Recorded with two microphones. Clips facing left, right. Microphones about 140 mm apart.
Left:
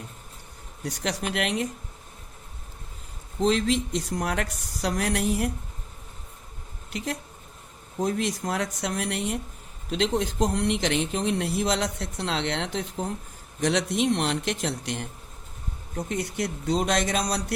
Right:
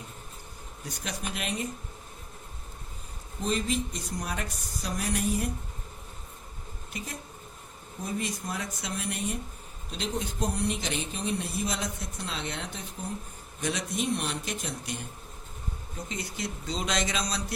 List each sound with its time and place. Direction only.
0.9 s speech: 80° left
3.4 s speech: 90° left
6.9 s a woman's voice: 80° left
9.9 s speech: 90° left
16.0 s speech: 65° left (ahead or behind)